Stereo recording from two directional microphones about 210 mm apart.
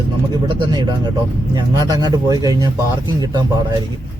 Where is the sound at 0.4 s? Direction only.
20° right (ahead or behind).